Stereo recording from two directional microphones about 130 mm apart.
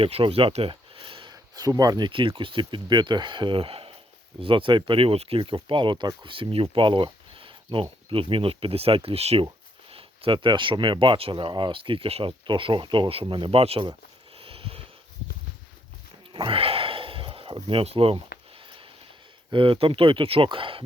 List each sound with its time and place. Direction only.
0.0 s speech: 45° right (ahead or behind)
14.3 s a sound: 45° right (ahead or behind)
16.3 s sniff: 45° right (ahead or behind)
19.5 s speech: 40° right (ahead or behind)